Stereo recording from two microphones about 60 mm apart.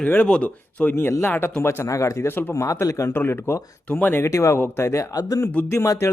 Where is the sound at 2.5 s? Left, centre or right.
Left.